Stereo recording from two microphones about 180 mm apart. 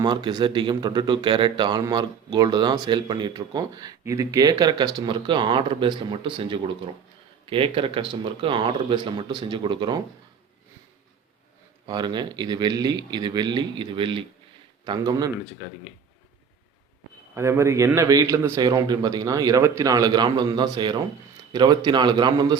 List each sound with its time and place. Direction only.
0.0 s a man's voice: 25° right (ahead or behind)
11.9 s a man's voice: 25° right (ahead or behind)
17.3 s a man's voice: 15° right (ahead or behind)